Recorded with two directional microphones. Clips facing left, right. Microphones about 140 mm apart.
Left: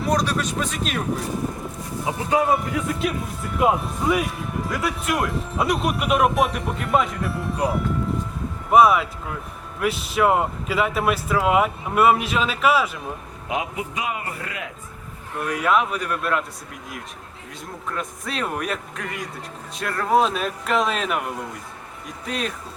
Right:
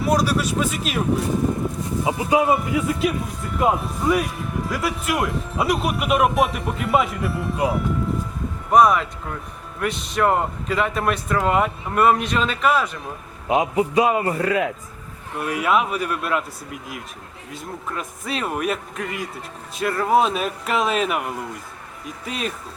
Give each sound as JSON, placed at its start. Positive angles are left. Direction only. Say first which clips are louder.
{"t": 0.0, "sound": "speech", "louder": "right 2 dB", "side_deg": -5}
{"t": 2.3, "sound": "speech", "louder": "right 1 dB", "side_deg": 0}
{"t": 13.5, "sound": "a man's voice", "louder": "right 8 dB", "side_deg": -35}
{"t": 15.4, "sound": "speech", "louder": "even", "side_deg": -5}
{"t": 17.5, "sound": "speech", "louder": "right 1 dB", "side_deg": -5}